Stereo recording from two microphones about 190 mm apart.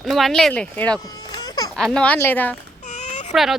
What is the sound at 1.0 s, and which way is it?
Baby cry, 20° left (ahead or behind).